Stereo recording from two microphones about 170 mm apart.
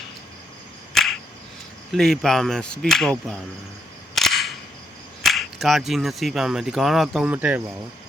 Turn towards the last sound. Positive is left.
turn(degrees=-10)  # may be behind; listen again after turning